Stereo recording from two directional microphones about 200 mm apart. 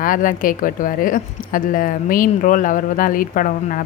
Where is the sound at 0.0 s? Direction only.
40° left (ahead or behind).